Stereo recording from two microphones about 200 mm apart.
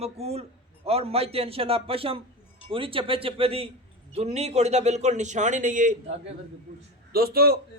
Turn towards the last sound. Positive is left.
turn(degrees=-50)  # may be behind; listen again after turning